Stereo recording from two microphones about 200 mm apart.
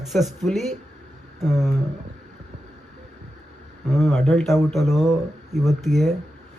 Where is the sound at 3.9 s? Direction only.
Centre (ahead or behind).